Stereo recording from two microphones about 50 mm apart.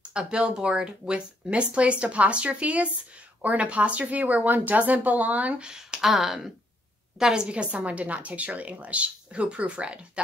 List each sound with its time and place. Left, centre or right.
0.1 s speech: centre
5.6 s speech: centre
7.4 s speech: right